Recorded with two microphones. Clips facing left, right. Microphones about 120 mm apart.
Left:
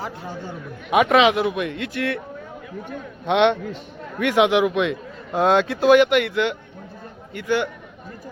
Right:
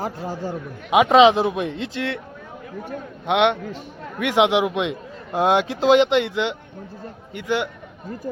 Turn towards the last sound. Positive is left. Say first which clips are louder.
# left 1 dB
turn(degrees=-15)  # may be behind; listen again after turning